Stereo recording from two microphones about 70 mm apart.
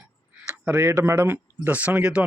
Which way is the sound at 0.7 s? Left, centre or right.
Right.